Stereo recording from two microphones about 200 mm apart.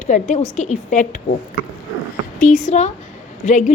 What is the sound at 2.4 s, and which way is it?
A woman's voice, 40° left (ahead or behind).